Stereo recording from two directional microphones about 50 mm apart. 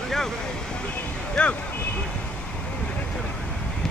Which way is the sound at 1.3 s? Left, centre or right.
Left.